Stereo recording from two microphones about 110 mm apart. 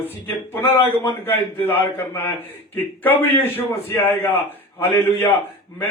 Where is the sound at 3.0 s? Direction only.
15° left (ahead or behind).